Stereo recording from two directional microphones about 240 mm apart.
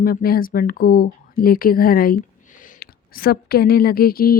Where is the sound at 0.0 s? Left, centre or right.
Left.